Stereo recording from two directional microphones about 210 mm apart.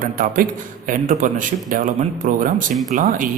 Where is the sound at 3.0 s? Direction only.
40° right (ahead or behind).